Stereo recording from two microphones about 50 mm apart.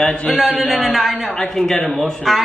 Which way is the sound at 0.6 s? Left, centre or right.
Centre.